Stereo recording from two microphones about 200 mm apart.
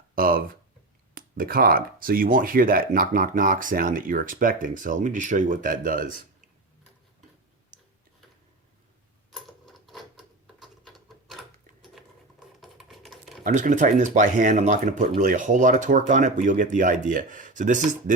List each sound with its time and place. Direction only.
0.2 s a sound: 45° right (ahead or behind)
1.1 s speech: 45° right (ahead or behind)
9.3 s sewing machine: centre (ahead or behind)
10.2 s a sound: centre (ahead or behind)
12.0 s patter: centre (ahead or behind)
12.5 s typing: centre (ahead or behind)
13.4 s speech: 40° right (ahead or behind)